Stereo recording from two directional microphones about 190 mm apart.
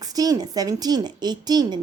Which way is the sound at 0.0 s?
20° right (ahead or behind).